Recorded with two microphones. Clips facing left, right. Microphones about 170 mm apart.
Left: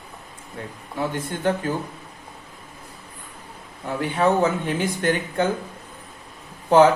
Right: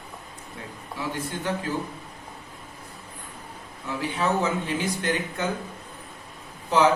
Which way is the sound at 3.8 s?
55° left (ahead or behind).